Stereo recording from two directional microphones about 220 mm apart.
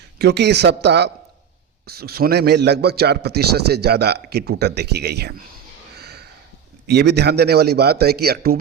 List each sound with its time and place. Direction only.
0.2 s a man's voice: 50° right (ahead or behind)
6.0 s a sound: 45° right (ahead or behind)
6.8 s a man's voice: 50° right (ahead or behind)